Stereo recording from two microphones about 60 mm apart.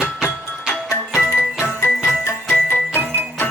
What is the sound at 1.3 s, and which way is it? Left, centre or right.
Music, left.